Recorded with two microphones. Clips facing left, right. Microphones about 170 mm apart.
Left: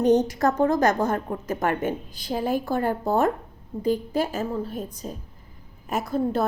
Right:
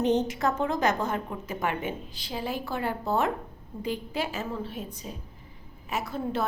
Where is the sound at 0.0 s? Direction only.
40° left (ahead or behind).